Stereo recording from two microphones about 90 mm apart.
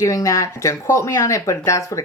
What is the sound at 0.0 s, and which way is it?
Speech, 35° left (ahead or behind).